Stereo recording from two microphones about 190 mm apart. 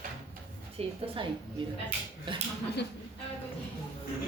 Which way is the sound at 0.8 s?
30° right (ahead or behind).